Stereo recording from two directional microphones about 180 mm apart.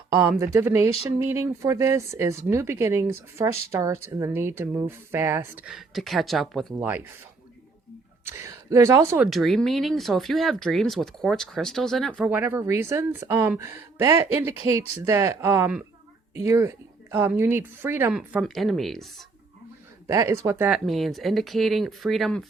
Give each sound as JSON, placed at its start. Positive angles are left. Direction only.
{"t": 0.2, "sound": "speech", "side_deg": -15}
{"t": 8.3, "sound": "speech", "side_deg": -15}
{"t": 9.2, "sound": "speech", "side_deg": 0}
{"t": 20.1, "sound": "speech", "side_deg": -20}